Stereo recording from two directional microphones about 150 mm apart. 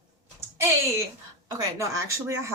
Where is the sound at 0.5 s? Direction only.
20° right (ahead or behind).